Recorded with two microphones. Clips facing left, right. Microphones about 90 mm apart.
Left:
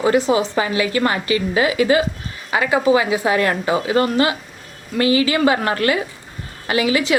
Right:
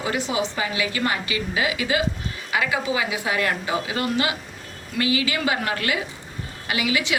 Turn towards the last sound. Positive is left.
turn(degrees=35)  # may be behind; listen again after turning